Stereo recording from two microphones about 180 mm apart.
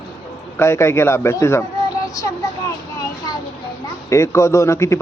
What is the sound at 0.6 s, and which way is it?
A man's voice, 15° left (ahead or behind).